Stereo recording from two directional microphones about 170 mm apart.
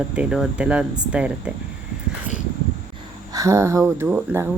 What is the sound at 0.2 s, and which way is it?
Speech, 5° right (ahead or behind).